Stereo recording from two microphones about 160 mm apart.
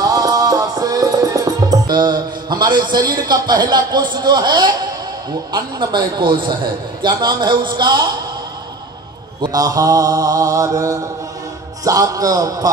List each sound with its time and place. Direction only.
0.0 s music: 20° right (ahead or behind)
5.5 s a man's voice: 30° right (ahead or behind)
9.4 s a man's voice: 25° right (ahead or behind)